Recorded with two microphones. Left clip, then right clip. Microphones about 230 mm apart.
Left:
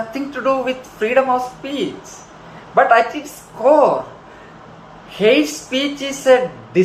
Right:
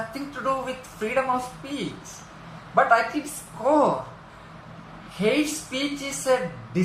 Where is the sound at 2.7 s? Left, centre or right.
Right.